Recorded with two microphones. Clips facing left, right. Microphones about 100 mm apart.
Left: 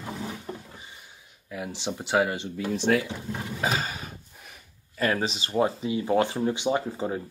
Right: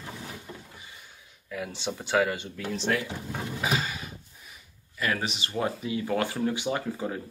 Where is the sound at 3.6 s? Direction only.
40° left (ahead or behind).